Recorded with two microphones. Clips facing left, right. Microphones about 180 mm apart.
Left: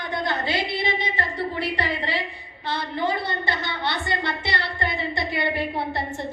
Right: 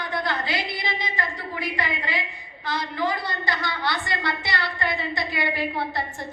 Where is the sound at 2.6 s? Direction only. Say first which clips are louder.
Left 1 dB; 25° left (ahead or behind).